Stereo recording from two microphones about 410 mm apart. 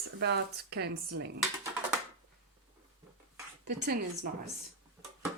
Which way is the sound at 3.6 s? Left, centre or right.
Right.